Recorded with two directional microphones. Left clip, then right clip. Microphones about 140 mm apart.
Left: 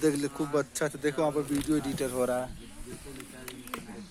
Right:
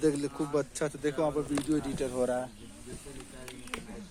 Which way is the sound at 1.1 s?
55° left (ahead or behind).